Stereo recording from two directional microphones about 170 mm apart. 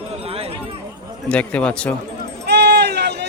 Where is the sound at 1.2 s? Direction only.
5° left (ahead or behind).